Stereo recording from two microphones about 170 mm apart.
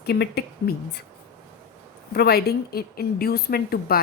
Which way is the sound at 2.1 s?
70° left (ahead or behind).